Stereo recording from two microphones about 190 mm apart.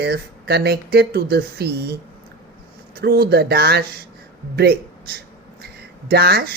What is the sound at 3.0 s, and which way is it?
Speech, 55° right (ahead or behind).